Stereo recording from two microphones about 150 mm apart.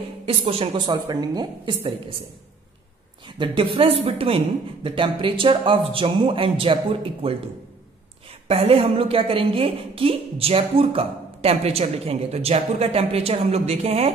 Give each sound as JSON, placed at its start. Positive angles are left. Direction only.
{"t": 0.2, "sound": "a woman's voice", "side_deg": -40}
{"t": 3.3, "sound": "a woman's voice", "side_deg": -35}
{"t": 8.5, "sound": "a woman's voice", "side_deg": -40}